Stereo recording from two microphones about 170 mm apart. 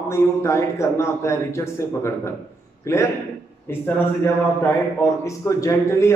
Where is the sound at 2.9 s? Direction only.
15° left (ahead or behind).